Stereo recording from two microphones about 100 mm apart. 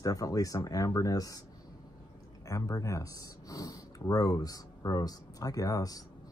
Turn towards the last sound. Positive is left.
turn(degrees=35)  # may be behind; listen again after turning